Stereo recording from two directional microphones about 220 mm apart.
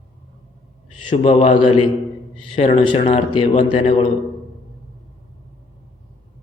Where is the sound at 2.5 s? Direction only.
25° left (ahead or behind).